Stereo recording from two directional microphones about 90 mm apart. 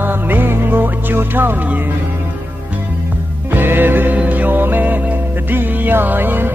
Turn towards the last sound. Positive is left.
turn(degrees=-20)  # may be behind; listen again after turning